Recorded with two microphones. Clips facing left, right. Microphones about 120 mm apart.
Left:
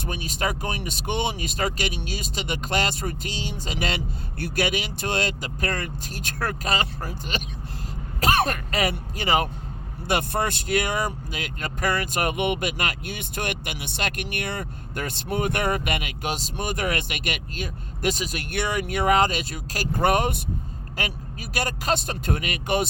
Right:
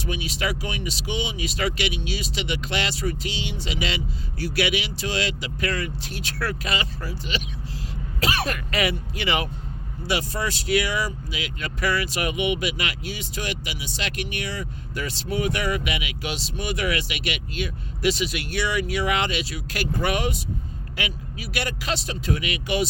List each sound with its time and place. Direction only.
0.0 s speech: 45° left (ahead or behind)
10.1 s speech: 55° left (ahead or behind)